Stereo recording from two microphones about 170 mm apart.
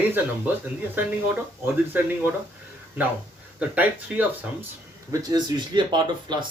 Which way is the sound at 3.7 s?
10° right (ahead or behind).